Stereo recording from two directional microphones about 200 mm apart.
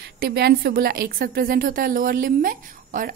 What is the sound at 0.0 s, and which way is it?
A woman's voice, 50° right (ahead or behind).